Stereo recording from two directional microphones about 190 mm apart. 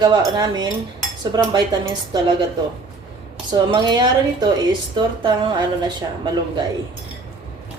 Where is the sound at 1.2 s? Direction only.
20° right (ahead or behind).